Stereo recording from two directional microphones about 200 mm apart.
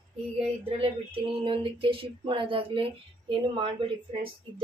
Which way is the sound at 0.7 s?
25° right (ahead or behind).